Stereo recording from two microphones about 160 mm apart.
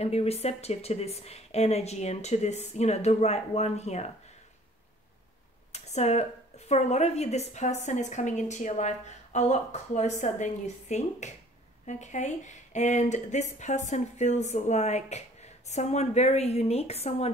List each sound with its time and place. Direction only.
0.0 s speech: 40° left (ahead or behind)
5.7 s a sound: 45° left (ahead or behind)
6.7 s speech: 45° left (ahead or behind)